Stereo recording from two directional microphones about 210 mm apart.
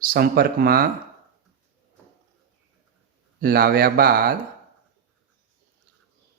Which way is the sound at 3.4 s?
45° right (ahead or behind).